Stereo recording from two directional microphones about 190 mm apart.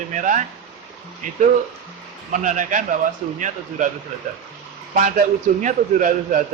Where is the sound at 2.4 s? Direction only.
40° right (ahead or behind).